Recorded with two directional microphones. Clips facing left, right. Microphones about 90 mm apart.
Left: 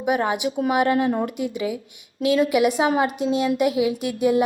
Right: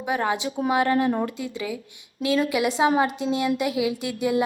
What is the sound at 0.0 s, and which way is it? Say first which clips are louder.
A woman's voice: left 3 dB; 15° left (ahead or behind).